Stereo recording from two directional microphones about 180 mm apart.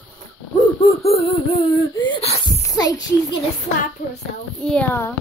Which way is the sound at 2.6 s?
20° left (ahead or behind).